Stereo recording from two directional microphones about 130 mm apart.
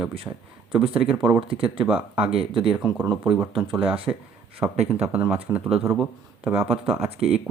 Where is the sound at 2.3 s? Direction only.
45° right (ahead or behind).